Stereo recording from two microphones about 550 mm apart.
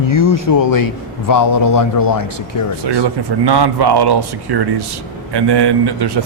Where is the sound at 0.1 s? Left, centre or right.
Left.